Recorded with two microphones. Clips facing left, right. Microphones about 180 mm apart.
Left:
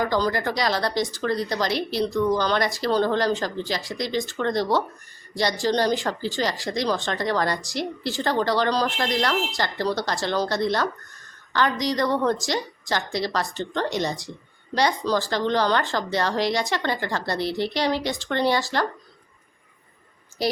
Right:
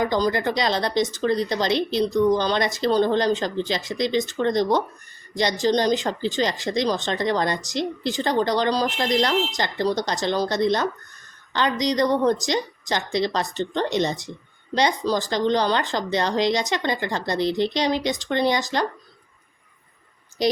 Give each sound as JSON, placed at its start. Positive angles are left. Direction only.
{"t": 0.0, "sound": "speech", "side_deg": -20}